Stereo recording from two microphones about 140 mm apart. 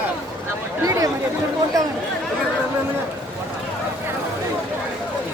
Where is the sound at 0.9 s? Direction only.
25° right (ahead or behind).